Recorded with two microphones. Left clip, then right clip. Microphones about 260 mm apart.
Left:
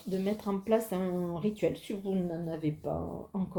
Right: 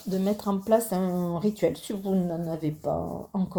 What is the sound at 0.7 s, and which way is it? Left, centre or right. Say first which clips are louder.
Speech: right 6 dB; right.